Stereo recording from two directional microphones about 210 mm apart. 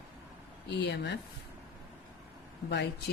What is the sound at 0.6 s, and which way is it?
Speech, 55° left (ahead or behind).